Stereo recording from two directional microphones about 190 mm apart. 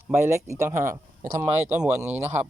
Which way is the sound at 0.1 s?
15° right (ahead or behind).